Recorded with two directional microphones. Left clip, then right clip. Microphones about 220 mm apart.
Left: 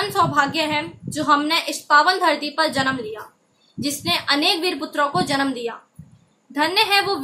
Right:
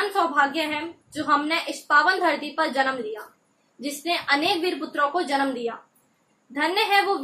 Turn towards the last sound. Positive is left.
turn(degrees=20)  # may be behind; listen again after turning